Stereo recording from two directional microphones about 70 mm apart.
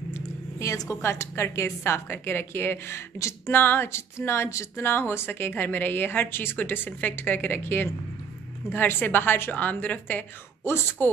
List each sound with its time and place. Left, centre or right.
0.1 s speech: left
3.5 s a woman's voice: left
10.6 s speech: left